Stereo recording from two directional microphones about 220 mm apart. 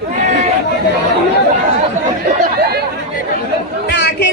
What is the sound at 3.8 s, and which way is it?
Chatter, 50° left (ahead or behind).